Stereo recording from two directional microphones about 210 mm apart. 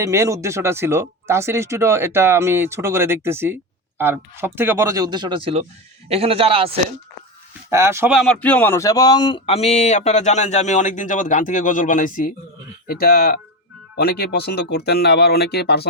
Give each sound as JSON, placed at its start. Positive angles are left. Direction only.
{"t": 0.0, "sound": "a man's voice", "side_deg": -15}
{"t": 7.7, "sound": "speech", "side_deg": -10}